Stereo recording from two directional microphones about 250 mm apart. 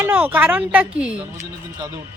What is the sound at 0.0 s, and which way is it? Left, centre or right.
Speech, centre.